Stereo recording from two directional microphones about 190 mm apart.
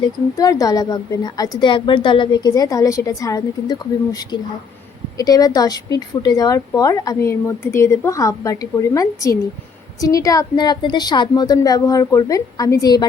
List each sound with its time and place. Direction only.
0.0 s a woman's voice: 20° left (ahead or behind)